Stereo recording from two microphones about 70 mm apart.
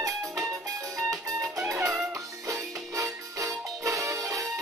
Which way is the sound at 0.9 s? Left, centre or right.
Right.